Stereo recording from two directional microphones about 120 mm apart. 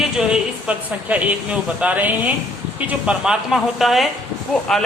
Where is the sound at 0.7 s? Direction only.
10° right (ahead or behind).